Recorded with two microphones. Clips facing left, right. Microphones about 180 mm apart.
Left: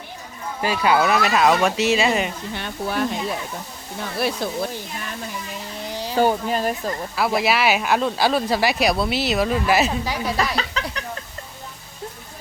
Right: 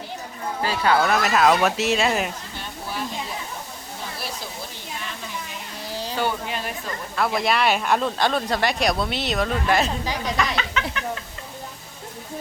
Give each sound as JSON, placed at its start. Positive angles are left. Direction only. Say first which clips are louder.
{"t": 0.6, "sound": "speech", "louder": "left 2 dB", "side_deg": 15}
{"t": 1.0, "sound": "speech", "louder": "left 1 dB", "side_deg": 0}
{"t": 2.6, "sound": "speech", "louder": "left 8 dB", "side_deg": 65}
{"t": 4.2, "sound": "speech", "louder": "left 10 dB", "side_deg": 60}
{"t": 5.8, "sound": "a sound", "louder": "left 1 dB", "side_deg": 15}
{"t": 6.1, "sound": "speech", "louder": "left 8 dB", "side_deg": 40}
{"t": 7.2, "sound": "speech", "louder": "left 1 dB", "side_deg": 5}
{"t": 10.3, "sound": "a sound", "louder": "left 1 dB", "side_deg": 35}